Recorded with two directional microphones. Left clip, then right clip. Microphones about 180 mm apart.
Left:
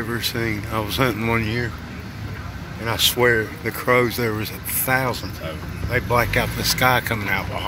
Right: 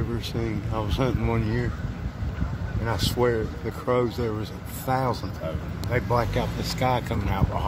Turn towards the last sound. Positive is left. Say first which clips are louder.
# left 7 dB
turn(degrees=-5)  # may be behind; listen again after turning